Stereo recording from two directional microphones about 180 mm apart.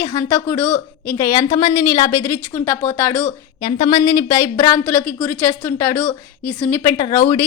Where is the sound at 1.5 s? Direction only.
25° left (ahead or behind).